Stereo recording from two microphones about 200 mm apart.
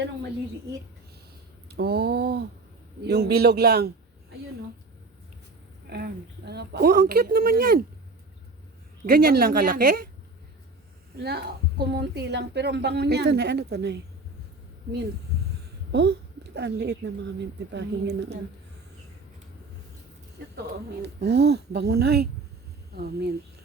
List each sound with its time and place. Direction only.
1.6 s a woman's voice: 50° right (ahead or behind)
5.9 s a woman's voice: 55° right (ahead or behind)
9.0 s a woman's voice: 50° right (ahead or behind)
11.1 s a woman's voice: 55° right (ahead or behind)
15.9 s a woman's voice: 60° right (ahead or behind)
20.6 s a woman's voice: 55° right (ahead or behind)